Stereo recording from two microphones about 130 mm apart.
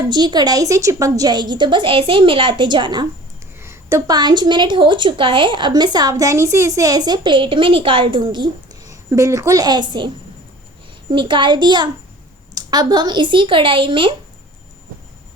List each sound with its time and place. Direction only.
0.1 s a woman's voice: 35° right (ahead or behind)
3.6 s a woman's voice: 20° right (ahead or behind)
11.1 s a woman's voice: 40° right (ahead or behind)